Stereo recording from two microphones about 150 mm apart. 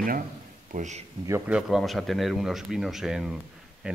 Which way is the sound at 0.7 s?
50° right (ahead or behind).